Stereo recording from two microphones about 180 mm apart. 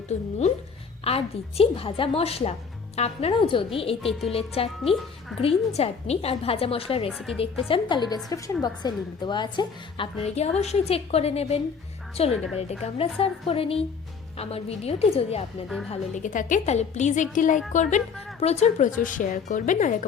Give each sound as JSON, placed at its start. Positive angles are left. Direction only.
{"t": 0.1, "sound": "a woman's voice", "side_deg": 40}
{"t": 10.2, "sound": "a woman's voice", "side_deg": 35}